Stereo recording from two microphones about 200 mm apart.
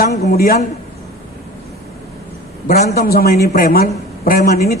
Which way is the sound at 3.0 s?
50° left (ahead or behind).